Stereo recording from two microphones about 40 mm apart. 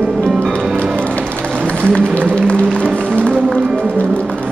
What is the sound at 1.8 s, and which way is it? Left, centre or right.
Music, left.